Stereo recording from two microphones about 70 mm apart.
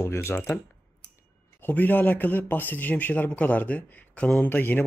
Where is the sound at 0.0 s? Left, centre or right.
Left.